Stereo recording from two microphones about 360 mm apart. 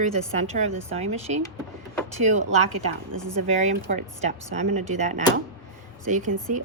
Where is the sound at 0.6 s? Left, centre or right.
Centre.